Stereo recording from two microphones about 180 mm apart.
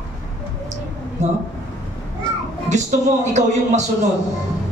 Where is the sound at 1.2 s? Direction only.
40° right (ahead or behind).